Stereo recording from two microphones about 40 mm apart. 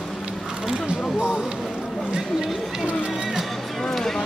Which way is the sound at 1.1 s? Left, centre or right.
Centre.